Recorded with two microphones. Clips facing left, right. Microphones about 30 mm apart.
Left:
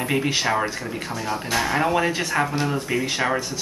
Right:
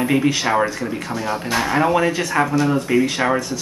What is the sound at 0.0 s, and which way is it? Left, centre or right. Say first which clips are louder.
A man's voice: right 4 dB; centre.